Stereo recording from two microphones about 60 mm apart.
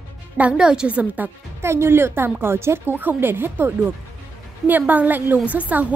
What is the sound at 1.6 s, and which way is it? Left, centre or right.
A woman's voice, right.